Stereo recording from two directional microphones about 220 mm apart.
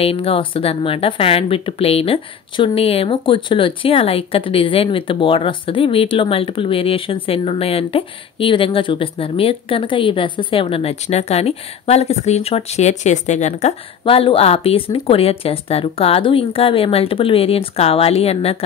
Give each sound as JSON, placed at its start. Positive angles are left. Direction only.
{"t": 0.0, "sound": "speech", "side_deg": 25}